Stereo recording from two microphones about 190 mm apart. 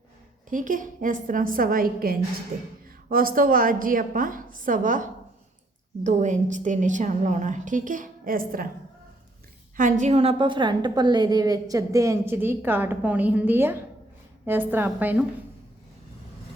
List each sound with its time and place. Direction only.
0.5 s a woman's voice: 45° right (ahead or behind)
9.7 s a woman's voice: 40° right (ahead or behind); by 15.2 s 10° right (ahead or behind)